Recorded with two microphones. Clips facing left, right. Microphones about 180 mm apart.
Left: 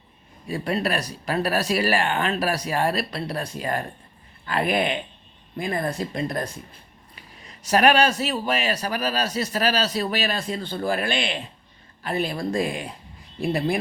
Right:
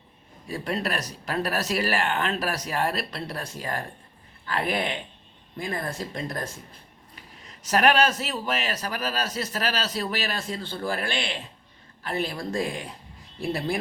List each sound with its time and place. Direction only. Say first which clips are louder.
0.5 s speech: left 4 dB; 10° left (ahead or behind)